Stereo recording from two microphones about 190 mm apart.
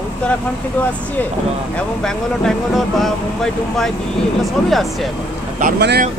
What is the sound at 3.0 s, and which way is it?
Speech, centre (ahead or behind).